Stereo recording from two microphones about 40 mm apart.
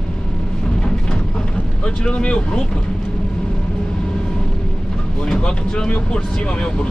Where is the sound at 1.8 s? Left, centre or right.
Left.